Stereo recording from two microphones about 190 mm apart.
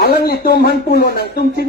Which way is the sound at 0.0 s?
55° left (ahead or behind).